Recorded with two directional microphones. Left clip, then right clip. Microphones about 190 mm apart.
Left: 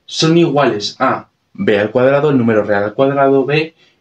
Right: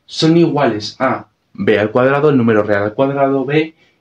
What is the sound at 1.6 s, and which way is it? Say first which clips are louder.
Speech: even; 25° right (ahead or behind).